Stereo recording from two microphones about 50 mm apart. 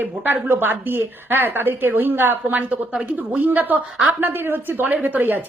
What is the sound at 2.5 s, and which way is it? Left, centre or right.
A woman's voice, right.